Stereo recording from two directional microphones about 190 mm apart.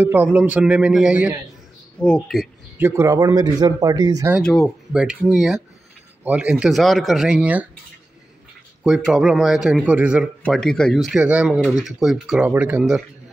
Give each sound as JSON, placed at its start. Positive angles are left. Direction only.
{"t": 0.0, "sound": "a man's voice", "side_deg": -10}
{"t": 2.0, "sound": "speech", "side_deg": 5}
{"t": 2.8, "sound": "speech", "side_deg": -15}
{"t": 4.5, "sound": "speech", "side_deg": 0}
{"t": 8.8, "sound": "speech", "side_deg": -5}